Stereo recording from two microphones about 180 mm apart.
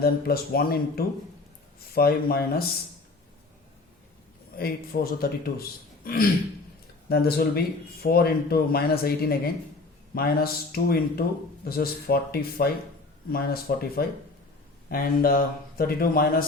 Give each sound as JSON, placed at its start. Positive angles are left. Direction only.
{"t": 0.0, "sound": "speech", "side_deg": 55}
{"t": 4.5, "sound": "speech", "side_deg": 55}